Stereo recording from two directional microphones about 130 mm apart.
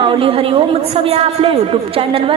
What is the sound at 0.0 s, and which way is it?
A woman's voice, 40° right (ahead or behind).